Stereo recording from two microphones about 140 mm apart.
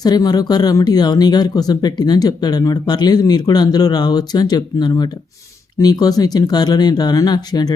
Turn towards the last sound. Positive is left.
turn(degrees=30)  # may be behind; listen again after turning